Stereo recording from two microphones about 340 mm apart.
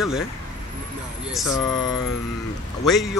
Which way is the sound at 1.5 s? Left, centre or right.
Centre.